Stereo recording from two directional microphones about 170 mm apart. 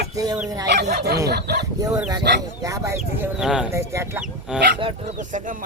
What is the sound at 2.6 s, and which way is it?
Speech, 20° right (ahead or behind).